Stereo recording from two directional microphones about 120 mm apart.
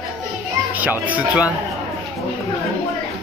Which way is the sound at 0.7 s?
15° right (ahead or behind).